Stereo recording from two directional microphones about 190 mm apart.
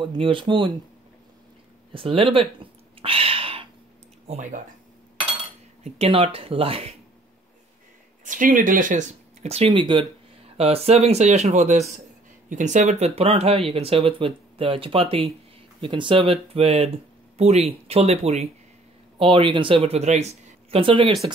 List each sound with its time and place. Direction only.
0.0 s speech: 25° right (ahead or behind)
1.9 s a sound: 30° right (ahead or behind)
4.3 s speech: 40° right (ahead or behind)
5.9 s speech: 30° right (ahead or behind)
8.3 s speech: 45° right (ahead or behind)